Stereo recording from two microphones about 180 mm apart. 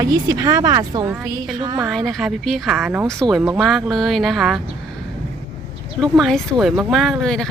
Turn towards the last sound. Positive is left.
turn(degrees=0)  # may be behind; listen again after turning